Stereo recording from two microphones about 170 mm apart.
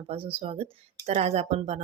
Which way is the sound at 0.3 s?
35° right (ahead or behind).